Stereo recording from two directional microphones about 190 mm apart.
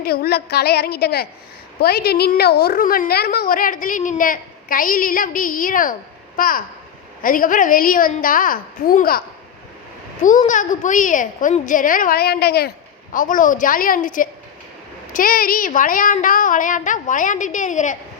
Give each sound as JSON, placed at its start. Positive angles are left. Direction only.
{"t": 0.0, "sound": "a woman's voice", "side_deg": 55}
{"t": 10.2, "sound": "a woman's voice", "side_deg": 45}